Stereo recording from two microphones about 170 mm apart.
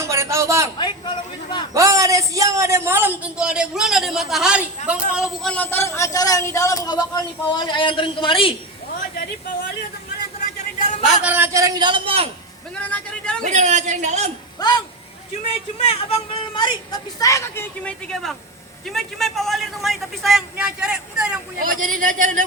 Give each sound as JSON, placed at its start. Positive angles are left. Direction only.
{"t": 0.0, "sound": "a sound", "side_deg": -15}
{"t": 0.8, "sound": "speech", "side_deg": 25}
{"t": 1.7, "sound": "a man's voice", "side_deg": -20}
{"t": 10.8, "sound": "a sound", "side_deg": 45}
{"t": 11.2, "sound": "a man's voice", "side_deg": -10}
{"t": 12.7, "sound": "a sound", "side_deg": 5}
{"t": 13.4, "sound": "a woman's voice", "side_deg": -45}
{"t": 15.8, "sound": "speech", "side_deg": 35}
{"t": 21.6, "sound": "a woman's voice", "side_deg": -55}